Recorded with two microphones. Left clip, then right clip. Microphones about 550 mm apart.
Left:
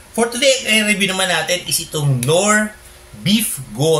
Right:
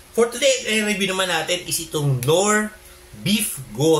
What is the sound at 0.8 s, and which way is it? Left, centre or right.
A man's voice, right.